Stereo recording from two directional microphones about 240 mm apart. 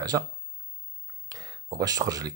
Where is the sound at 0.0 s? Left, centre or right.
Centre.